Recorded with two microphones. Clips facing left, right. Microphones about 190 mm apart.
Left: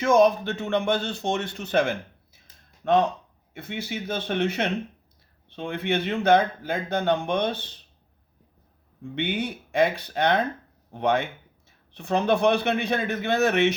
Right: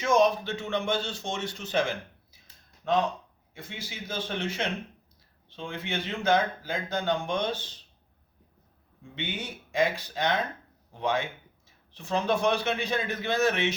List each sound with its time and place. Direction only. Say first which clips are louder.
0.0 s a man's voice: left 4 dB; 55° left (ahead or behind)
3.5 s a man's voice: left 9 dB; 60° left (ahead or behind)
9.1 s a man's voice: left 8 dB; 60° left (ahead or behind)